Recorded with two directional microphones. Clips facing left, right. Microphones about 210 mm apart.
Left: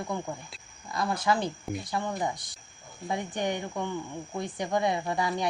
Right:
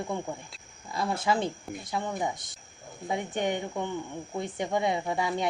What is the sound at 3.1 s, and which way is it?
Speech, 20° right (ahead or behind).